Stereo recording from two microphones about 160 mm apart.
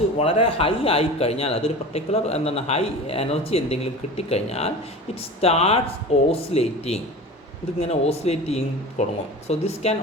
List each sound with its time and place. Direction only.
0.2 s a man's voice: 35° left (ahead or behind)